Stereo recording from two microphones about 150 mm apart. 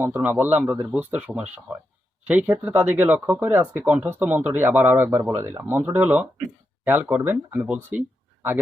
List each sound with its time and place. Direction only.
0.0 s speech: 15° right (ahead or behind)
2.6 s speech: 10° right (ahead or behind)